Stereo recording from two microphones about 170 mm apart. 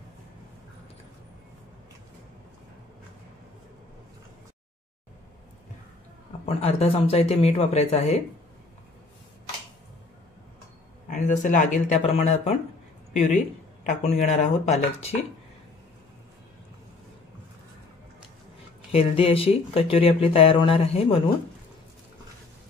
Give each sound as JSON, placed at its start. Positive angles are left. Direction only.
{"t": 6.4, "sound": "speech", "side_deg": 35}
{"t": 11.1, "sound": "speech", "side_deg": 45}
{"t": 18.9, "sound": "speech", "side_deg": 35}